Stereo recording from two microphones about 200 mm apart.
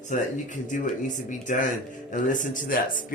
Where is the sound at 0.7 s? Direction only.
40° left (ahead or behind).